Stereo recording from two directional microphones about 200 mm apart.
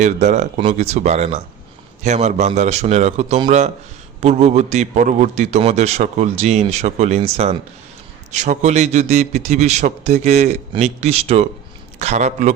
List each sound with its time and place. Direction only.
0.0 s a man's voice: 35° right (ahead or behind)